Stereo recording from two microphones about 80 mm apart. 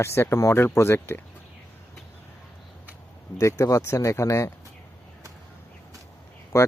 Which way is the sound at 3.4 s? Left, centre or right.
Left.